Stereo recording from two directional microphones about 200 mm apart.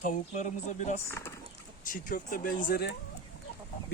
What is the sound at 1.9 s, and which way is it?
Speech, 40° left (ahead or behind).